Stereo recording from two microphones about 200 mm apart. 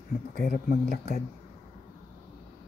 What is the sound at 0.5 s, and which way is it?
Speech, 40° left (ahead or behind).